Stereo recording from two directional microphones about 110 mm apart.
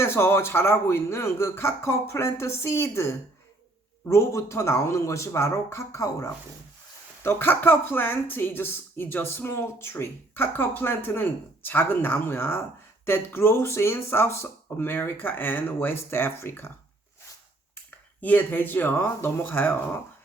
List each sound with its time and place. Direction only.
0.0 s speech: 20° left (ahead or behind)
18.2 s speech: 15° left (ahead or behind)